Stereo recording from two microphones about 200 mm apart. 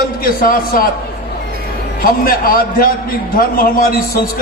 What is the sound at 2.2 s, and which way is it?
A man's voice, 45° left (ahead or behind).